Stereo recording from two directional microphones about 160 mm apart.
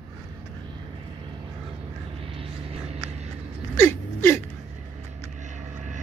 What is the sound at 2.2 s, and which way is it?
Vehicle, 35° right (ahead or behind).